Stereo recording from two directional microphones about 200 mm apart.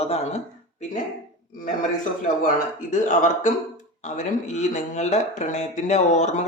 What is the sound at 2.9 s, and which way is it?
Speech, 35° left (ahead or behind).